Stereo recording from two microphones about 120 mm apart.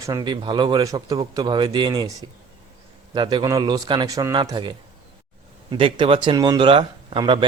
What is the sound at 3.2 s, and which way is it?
A man's voice, 40° right (ahead or behind).